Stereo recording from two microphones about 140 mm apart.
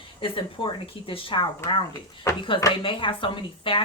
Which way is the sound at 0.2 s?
40° left (ahead or behind).